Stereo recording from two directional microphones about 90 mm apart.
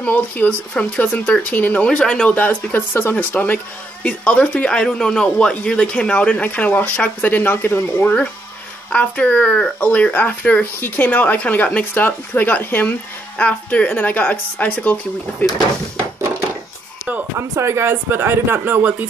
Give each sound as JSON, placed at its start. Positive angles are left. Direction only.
{"t": 0.0, "sound": "speech", "side_deg": 15}
{"t": 2.3, "sound": "speech", "side_deg": 20}
{"t": 17.4, "sound": "speech", "side_deg": -30}